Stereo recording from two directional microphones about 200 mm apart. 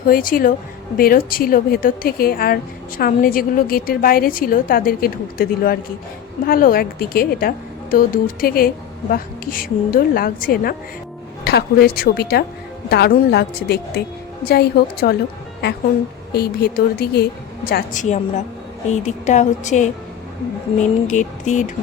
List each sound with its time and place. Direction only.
0.1 s a woman's voice: 45° left (ahead or behind)
16.3 s a woman's voice: 55° left (ahead or behind); by 19.9 s 35° left (ahead or behind)
21.1 s speech: 35° left (ahead or behind)